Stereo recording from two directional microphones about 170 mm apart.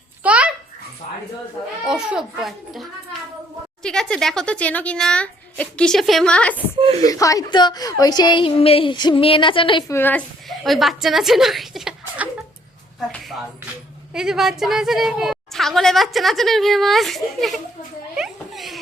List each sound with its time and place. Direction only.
0.2 s babbling: 10° right (ahead or behind)
1.8 s speech: 5° right (ahead or behind)
6.7 s speech: 30° right (ahead or behind)
7.0 s a woman's voice: 20° left (ahead or behind)
9.9 s a woman's voice: 10° left (ahead or behind)
10.6 s a woman's voice: centre (ahead or behind)
14.1 s a woman's voice: 5° right (ahead or behind)
18.2 s a sound: centre (ahead or behind)